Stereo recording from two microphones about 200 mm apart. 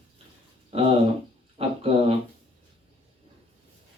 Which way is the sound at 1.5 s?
30° right (ahead or behind).